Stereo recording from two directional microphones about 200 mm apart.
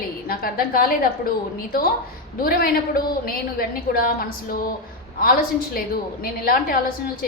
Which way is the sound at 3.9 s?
50° left (ahead or behind).